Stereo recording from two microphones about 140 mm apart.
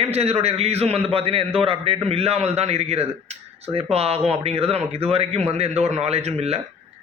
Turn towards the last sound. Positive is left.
turn(degrees=-50)  # may be behind; listen again after turning